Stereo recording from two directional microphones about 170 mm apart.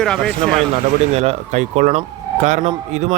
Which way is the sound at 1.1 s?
40° right (ahead or behind).